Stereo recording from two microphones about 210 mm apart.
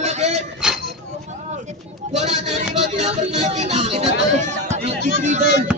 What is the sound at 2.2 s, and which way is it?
Speech, 30° right (ahead or behind).